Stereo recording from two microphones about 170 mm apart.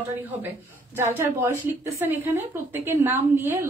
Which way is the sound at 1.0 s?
15° right (ahead or behind).